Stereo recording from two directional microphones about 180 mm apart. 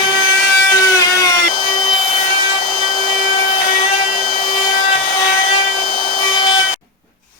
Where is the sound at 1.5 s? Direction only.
35° left (ahead or behind).